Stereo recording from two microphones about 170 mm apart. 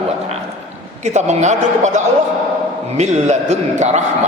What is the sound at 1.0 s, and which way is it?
Speech, 45° right (ahead or behind).